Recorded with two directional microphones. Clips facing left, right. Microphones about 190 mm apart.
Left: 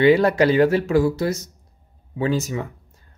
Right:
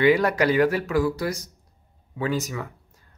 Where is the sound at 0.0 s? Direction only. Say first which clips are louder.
Left 4 dB; 30° left (ahead or behind).